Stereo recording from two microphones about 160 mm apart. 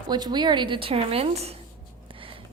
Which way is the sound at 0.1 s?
25° right (ahead or behind).